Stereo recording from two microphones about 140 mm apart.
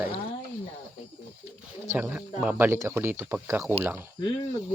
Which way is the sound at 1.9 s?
15° right (ahead or behind).